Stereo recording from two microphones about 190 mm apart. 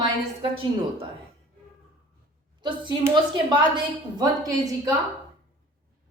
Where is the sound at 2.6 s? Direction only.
25° right (ahead or behind).